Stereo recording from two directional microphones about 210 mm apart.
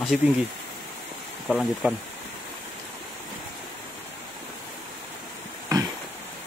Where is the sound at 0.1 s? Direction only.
5° right (ahead or behind).